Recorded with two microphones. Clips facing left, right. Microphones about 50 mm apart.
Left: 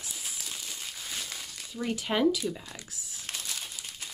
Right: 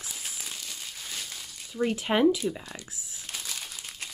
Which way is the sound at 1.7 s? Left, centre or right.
Centre.